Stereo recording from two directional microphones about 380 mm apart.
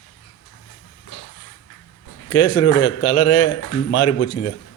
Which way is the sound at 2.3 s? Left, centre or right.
Left.